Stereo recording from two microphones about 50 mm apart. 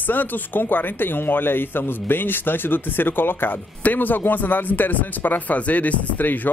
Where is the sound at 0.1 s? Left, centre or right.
Left.